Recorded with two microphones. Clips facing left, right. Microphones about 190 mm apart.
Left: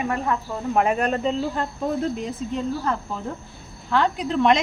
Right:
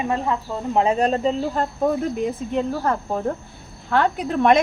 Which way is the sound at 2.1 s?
55° right (ahead or behind).